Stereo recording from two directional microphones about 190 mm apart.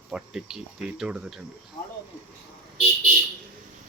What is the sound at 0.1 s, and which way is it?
Speech, 5° right (ahead or behind).